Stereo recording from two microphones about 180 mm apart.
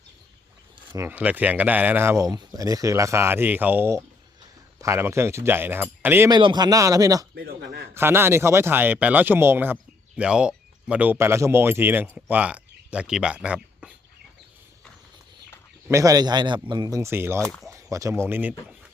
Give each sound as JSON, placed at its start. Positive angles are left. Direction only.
{"t": 0.9, "sound": "speech", "side_deg": -10}
{"t": 7.3, "sound": "a man's voice", "side_deg": -65}
{"t": 7.9, "sound": "speech", "side_deg": -15}
{"t": 15.9, "sound": "speech", "side_deg": -15}
{"t": 17.4, "sound": "speech", "side_deg": 5}
{"t": 17.7, "sound": "speech", "side_deg": -15}